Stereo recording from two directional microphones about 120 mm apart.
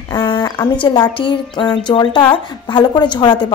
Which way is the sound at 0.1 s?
35° left (ahead or behind).